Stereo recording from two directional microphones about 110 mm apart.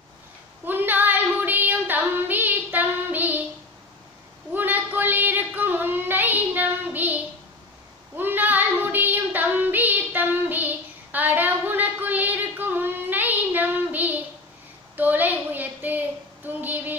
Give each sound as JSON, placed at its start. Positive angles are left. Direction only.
{"t": 0.7, "sound": "child singing", "side_deg": -15}
{"t": 4.6, "sound": "child singing", "side_deg": -15}
{"t": 8.2, "sound": "child singing", "side_deg": -15}
{"t": 15.0, "sound": "a sound", "side_deg": -15}